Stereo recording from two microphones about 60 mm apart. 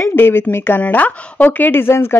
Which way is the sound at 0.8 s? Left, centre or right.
Left.